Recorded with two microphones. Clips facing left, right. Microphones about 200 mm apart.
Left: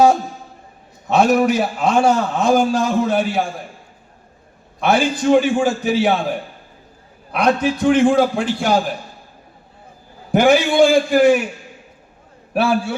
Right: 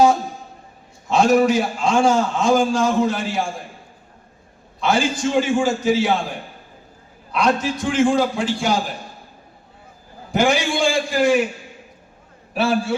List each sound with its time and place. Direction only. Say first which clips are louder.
1.0 s a man's voice: left 1 dB; 60° left (ahead or behind)
4.8 s a man's voice: left 3 dB; 60° left (ahead or behind)
7.3 s a man's voice: left 3 dB; 60° left (ahead or behind)
10.3 s a man's voice: left 6 dB; 60° left (ahead or behind)
12.5 s a man's voice: left 2 dB; 60° left (ahead or behind)